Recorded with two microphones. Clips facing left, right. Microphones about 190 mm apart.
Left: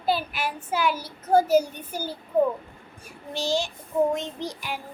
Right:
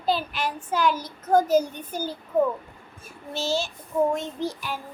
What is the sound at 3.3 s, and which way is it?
A child's voice, 15° left (ahead or behind).